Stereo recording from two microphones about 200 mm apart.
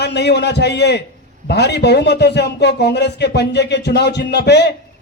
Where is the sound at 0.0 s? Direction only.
55° left (ahead or behind).